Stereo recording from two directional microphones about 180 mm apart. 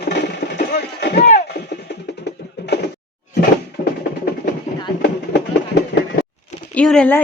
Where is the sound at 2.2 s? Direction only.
70° left (ahead or behind).